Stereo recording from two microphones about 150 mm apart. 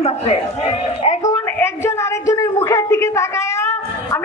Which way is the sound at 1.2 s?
20° left (ahead or behind).